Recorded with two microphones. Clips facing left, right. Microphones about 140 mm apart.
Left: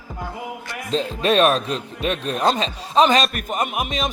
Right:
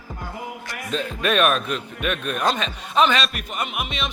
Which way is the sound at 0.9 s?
30° left (ahead or behind).